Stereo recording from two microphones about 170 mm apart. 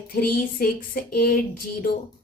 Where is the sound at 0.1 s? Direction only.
60° left (ahead or behind).